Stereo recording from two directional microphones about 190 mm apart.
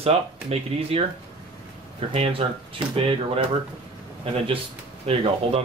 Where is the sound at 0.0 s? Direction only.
30° right (ahead or behind).